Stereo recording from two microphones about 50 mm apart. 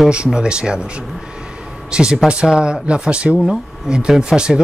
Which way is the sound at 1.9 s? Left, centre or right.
Centre.